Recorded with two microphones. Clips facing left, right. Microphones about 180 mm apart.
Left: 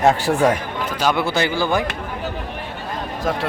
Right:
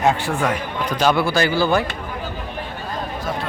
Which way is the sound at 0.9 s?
10° left (ahead or behind).